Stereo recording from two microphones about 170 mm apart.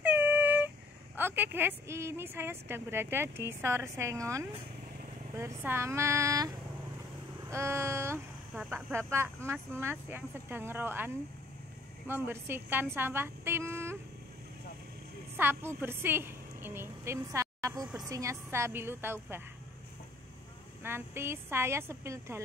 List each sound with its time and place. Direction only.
0.0 s a sound: 10° right (ahead or behind)
1.1 s a woman's voice: 10° right (ahead or behind)
12.1 s a woman's voice: 15° right (ahead or behind)
15.3 s a woman's voice: 10° right (ahead or behind)
20.8 s a woman's voice: 15° right (ahead or behind)